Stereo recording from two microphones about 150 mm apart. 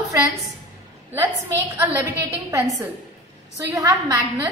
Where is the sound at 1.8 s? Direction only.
15° right (ahead or behind).